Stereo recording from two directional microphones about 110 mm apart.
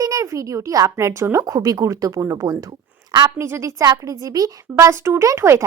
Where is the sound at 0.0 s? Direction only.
30° right (ahead or behind).